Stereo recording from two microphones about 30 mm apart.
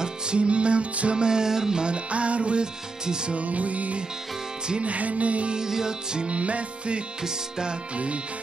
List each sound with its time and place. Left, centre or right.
0.0 s music: right
1.1 s music: right
1.9 s music: right
2.6 s music: right
3.3 s music: right
5.7 s music: right
6.2 s music: right
7.2 s music: right
7.9 s speech: right